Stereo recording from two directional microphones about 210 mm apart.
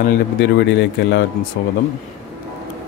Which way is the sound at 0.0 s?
50° left (ahead or behind).